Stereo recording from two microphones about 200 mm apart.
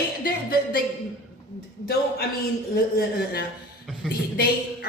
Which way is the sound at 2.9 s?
50° left (ahead or behind).